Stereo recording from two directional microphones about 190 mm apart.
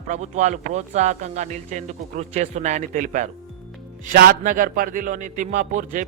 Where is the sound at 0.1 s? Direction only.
40° right (ahead or behind).